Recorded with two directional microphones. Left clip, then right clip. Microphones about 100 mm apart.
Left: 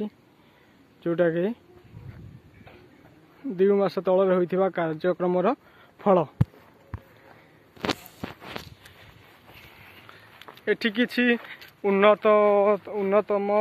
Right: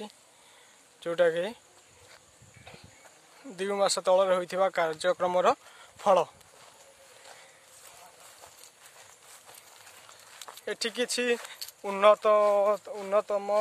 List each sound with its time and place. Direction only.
1.0 s speech: 40° right (ahead or behind)
3.5 s speech: 40° right (ahead or behind)
5.9 s speech: 10° right (ahead or behind)
10.3 s a sound: centre (ahead or behind)
10.6 s speech: 25° right (ahead or behind)